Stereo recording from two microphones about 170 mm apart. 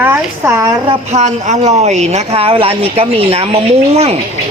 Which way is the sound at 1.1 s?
45° right (ahead or behind).